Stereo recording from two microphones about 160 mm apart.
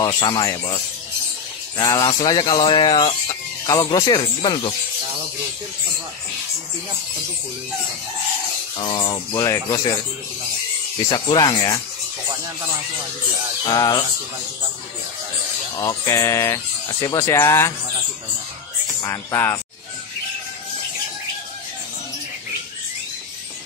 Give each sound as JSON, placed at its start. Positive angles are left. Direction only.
{"t": 0.0, "sound": "speech", "side_deg": 30}
{"t": 8.7, "sound": "speech", "side_deg": 30}
{"t": 11.1, "sound": "speech", "side_deg": 25}
{"t": 13.7, "sound": "speech", "side_deg": 20}
{"t": 15.8, "sound": "speech", "side_deg": 20}
{"t": 19.0, "sound": "speech", "side_deg": 15}